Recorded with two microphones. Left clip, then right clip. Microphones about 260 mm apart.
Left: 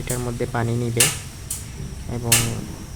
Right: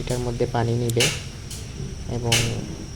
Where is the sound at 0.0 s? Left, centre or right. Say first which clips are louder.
Right 2 dB; centre.